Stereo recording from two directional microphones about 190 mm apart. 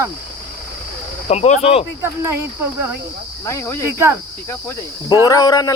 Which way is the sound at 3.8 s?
15° right (ahead or behind).